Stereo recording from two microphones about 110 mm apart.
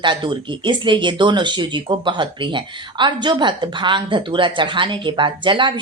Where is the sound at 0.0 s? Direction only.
45° right (ahead or behind).